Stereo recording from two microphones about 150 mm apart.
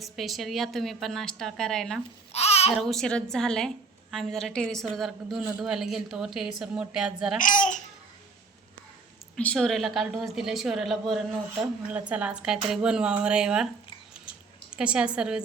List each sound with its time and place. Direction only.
0.0 s a woman's voice: centre (ahead or behind)
2.3 s babbling: 45° left (ahead or behind)
2.7 s a woman's voice: 5° left (ahead or behind)
7.3 s a child's voice: 60° left (ahead or behind)
9.3 s a woman's voice: 5° left (ahead or behind)
14.7 s speech: 5° right (ahead or behind)